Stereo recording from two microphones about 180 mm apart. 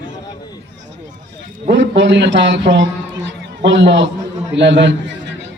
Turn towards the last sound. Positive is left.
turn(degrees=-80)